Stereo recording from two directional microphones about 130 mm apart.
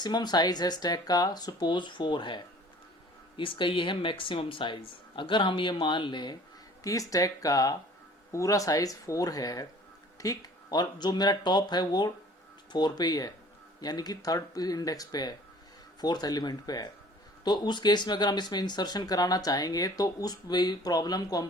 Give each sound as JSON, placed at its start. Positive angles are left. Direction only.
{"t": 0.0, "sound": "speech", "side_deg": 35}